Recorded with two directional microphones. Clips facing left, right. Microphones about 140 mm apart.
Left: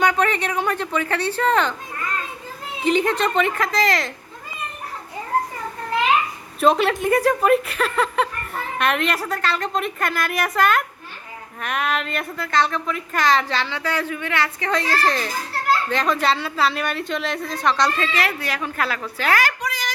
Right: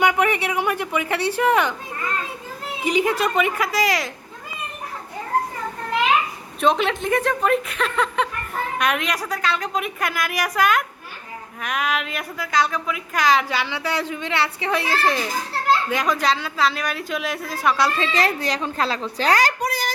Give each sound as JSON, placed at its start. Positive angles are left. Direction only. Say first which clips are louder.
{"t": 0.0, "sound": "a woman's voice", "louder": "even", "side_deg": -15}
{"t": 2.8, "sound": "a woman's voice", "louder": "left 1 dB", "side_deg": -10}
{"t": 6.6, "sound": "a woman's voice", "louder": "left 2 dB", "side_deg": 5}
{"t": 18.2, "sound": "a woman's voice", "louder": "right 2 dB", "side_deg": -25}
{"t": 19.4, "sound": "a sound", "louder": "right 3 dB", "side_deg": -35}